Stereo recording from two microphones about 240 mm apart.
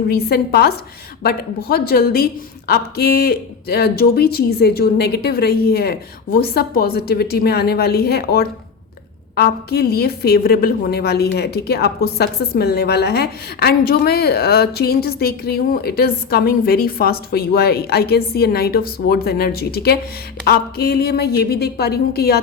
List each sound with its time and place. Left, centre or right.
0.1 s a woman's voice: left